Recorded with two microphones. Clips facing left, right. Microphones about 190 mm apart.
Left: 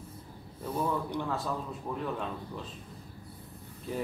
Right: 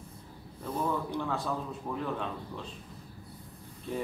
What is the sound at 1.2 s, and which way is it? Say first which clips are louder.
A man's voice: right 1 dB; centre (ahead or behind).